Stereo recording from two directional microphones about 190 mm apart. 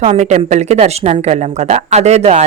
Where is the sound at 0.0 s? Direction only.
35° right (ahead or behind).